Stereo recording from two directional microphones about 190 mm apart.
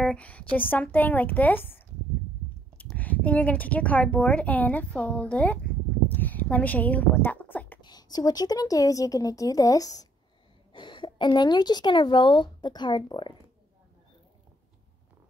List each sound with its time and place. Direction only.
0.0 s a woman's voice: 5° left (ahead or behind)
6.0 s a sound: 10° left (ahead or behind)
7.8 s a woman's voice: 20° left (ahead or behind)